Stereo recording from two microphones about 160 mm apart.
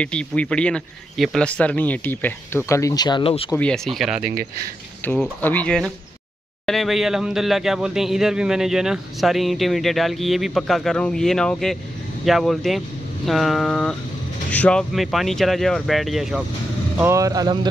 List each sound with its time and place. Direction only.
0.0 s speech: 5° left (ahead or behind); by 3.4 s 30° left (ahead or behind)
3.5 s speech: 5° left (ahead or behind)
5.0 s speech: 10° left (ahead or behind)
17.0 s speech: 20° right (ahead or behind)